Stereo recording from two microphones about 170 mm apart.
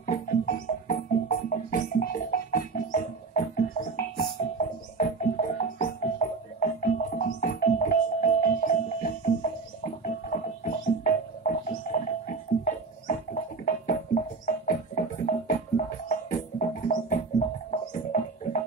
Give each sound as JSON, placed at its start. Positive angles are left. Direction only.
{"t": 0.0, "sound": "music", "side_deg": 50}
{"t": 10.0, "sound": "music", "side_deg": 50}